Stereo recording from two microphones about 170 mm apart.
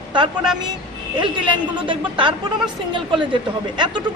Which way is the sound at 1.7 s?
30° right (ahead or behind).